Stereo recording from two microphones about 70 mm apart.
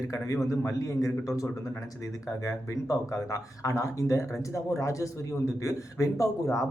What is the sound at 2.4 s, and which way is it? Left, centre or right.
A man's voice, left.